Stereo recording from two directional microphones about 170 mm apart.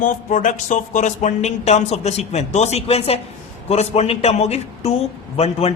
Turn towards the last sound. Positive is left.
turn(degrees=35)  # may be behind; listen again after turning